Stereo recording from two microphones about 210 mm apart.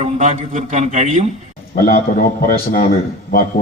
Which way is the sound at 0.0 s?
30° right (ahead or behind).